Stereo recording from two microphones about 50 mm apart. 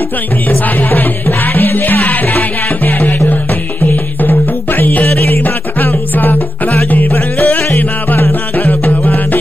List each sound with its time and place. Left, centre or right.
0.7 s music: left
7.1 s music: left